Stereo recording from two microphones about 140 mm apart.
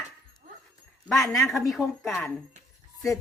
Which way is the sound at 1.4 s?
Centre (ahead or behind).